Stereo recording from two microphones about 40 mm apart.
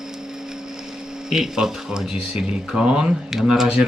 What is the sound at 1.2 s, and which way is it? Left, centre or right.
Speech, centre.